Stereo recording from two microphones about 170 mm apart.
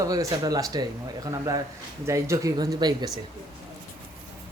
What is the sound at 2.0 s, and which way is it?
Speech, 15° right (ahead or behind).